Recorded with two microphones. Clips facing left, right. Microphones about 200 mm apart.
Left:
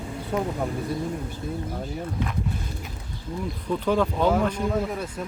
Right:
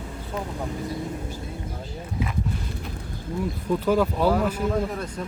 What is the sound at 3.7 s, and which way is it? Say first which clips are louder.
Speech: right 1 dB; 5° right (ahead or behind).